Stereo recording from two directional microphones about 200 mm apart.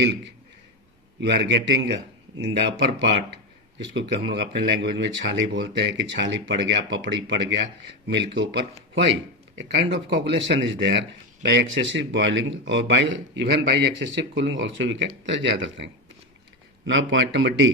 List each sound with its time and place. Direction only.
0.0 s a man's voice: 60° right (ahead or behind)